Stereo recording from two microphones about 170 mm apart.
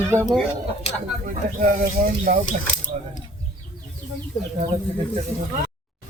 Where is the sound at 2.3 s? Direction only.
50° right (ahead or behind).